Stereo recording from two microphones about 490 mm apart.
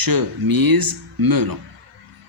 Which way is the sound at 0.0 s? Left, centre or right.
Right.